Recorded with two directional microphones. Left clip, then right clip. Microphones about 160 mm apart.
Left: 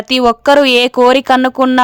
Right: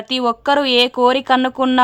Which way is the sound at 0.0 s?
40° left (ahead or behind).